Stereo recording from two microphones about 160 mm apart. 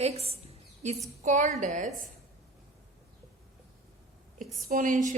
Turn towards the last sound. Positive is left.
turn(degrees=-60)  # may be behind; listen again after turning